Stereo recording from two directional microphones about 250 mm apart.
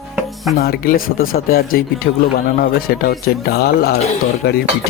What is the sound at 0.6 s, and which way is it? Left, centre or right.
Speech, left.